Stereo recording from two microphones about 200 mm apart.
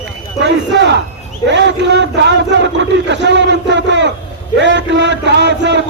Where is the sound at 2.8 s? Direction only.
60° right (ahead or behind).